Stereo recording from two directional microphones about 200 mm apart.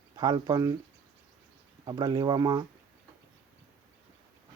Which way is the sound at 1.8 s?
20° right (ahead or behind).